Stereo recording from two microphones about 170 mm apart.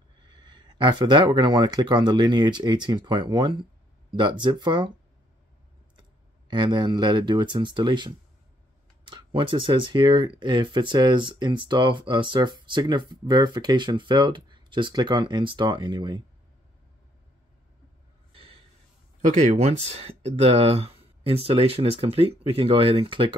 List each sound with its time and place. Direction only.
0.3 s speech: 25° right (ahead or behind)
5.9 s speech: 25° right (ahead or behind)
18.3 s a sound: 35° right (ahead or behind)
19.2 s speech: 40° right (ahead or behind)